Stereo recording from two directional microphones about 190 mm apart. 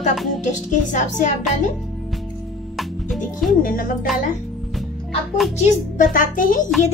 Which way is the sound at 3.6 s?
45° left (ahead or behind).